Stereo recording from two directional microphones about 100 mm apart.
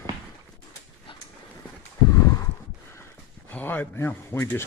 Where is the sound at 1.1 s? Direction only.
60° left (ahead or behind).